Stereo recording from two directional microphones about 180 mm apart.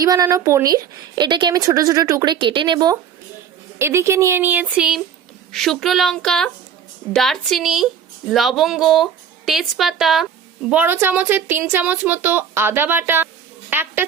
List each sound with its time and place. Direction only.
0.0 s a woman's voice: 20° right (ahead or behind)